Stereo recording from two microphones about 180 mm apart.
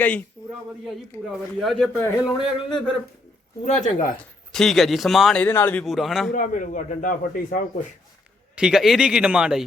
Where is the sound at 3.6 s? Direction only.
40° left (ahead or behind).